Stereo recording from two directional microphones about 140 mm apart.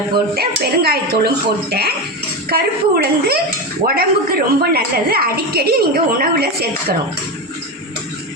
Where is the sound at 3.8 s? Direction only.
90° right.